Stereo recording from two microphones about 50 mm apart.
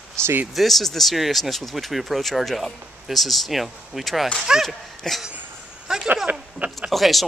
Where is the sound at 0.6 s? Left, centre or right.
Centre.